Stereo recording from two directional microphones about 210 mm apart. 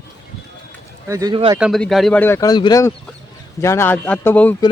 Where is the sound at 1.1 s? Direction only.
15° right (ahead or behind).